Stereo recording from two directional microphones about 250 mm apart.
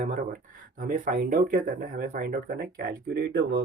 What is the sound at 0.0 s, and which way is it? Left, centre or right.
Speech, right.